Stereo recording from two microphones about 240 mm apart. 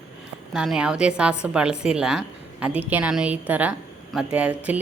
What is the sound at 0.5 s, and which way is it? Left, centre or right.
A woman's voice, centre.